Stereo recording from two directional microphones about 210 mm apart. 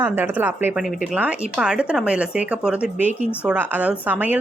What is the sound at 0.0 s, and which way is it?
Speech, 10° right (ahead or behind).